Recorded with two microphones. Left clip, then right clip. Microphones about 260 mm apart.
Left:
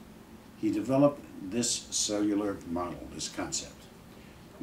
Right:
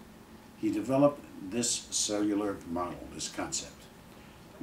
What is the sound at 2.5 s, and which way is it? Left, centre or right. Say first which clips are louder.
Speech: left 1 dB; centre.